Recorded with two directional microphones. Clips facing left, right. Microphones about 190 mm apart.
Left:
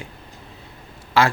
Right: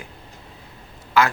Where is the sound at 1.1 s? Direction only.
30° left (ahead or behind).